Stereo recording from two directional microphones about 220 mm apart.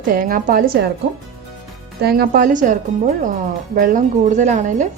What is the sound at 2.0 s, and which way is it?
A woman's voice, 45° right (ahead or behind).